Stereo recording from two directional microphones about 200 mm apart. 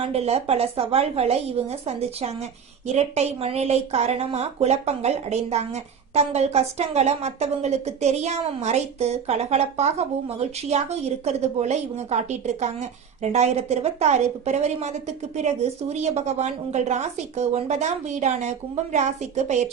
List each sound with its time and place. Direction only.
0.0 s a woman's voice: 30° right (ahead or behind)